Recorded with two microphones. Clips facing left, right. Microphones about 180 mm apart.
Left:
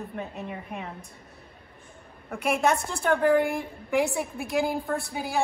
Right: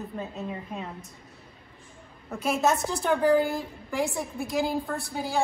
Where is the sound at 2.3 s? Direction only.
5° right (ahead or behind).